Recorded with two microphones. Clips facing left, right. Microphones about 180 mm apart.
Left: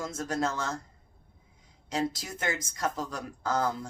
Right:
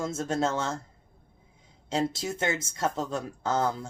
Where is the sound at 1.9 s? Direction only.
25° right (ahead or behind).